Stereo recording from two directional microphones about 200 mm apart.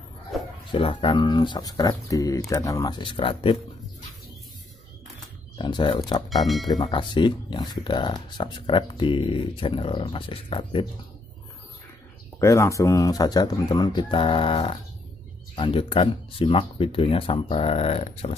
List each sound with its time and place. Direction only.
0.3 s bow-wow: centre (ahead or behind)
0.7 s speech: 25° left (ahead or behind)
5.6 s speech: 25° left (ahead or behind)
6.2 s speech: centre (ahead or behind)
6.7 s speech: 25° left (ahead or behind)
12.4 s speech: 15° left (ahead or behind); by 18.3 s 30° left (ahead or behind)